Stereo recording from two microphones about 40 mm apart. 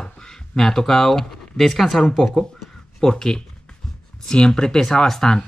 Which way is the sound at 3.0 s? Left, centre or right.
Centre.